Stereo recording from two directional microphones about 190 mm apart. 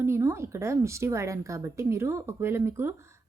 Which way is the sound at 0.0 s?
15° right (ahead or behind).